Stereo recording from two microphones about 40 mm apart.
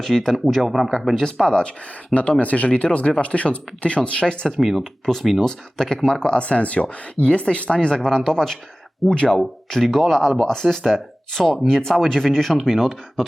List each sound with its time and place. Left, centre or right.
0.0 s speech: centre
1.5 s speech: left
2.4 s speech: left
4.6 s speech: centre
9.0 s speech: left
9.6 s speech: centre